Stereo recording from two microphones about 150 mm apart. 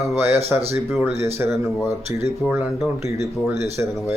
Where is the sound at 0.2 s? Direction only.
15° right (ahead or behind).